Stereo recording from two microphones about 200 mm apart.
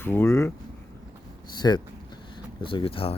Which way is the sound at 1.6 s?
20° left (ahead or behind).